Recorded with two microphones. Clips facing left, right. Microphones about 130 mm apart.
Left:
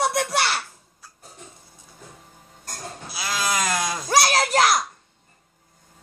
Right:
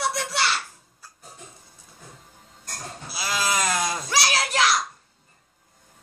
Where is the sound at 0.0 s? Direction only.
50° left (ahead or behind).